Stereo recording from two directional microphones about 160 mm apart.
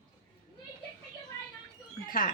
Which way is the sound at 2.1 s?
60° left (ahead or behind).